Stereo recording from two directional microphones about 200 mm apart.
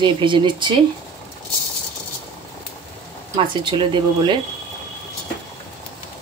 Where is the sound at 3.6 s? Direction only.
25° right (ahead or behind).